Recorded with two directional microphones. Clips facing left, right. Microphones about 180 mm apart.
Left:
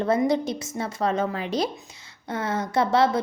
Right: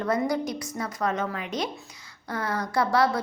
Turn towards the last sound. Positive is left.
turn(degrees=25)  # may be behind; listen again after turning